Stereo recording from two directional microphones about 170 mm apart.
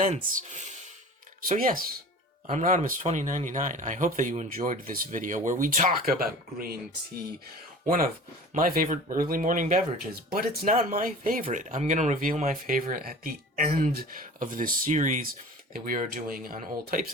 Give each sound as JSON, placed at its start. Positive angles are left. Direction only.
{"t": 0.3, "sound": "speech", "side_deg": -45}
{"t": 1.5, "sound": "speech", "side_deg": -55}
{"t": 2.5, "sound": "speech", "side_deg": -45}
{"t": 7.9, "sound": "speech", "side_deg": -55}
{"t": 10.3, "sound": "speech", "side_deg": -60}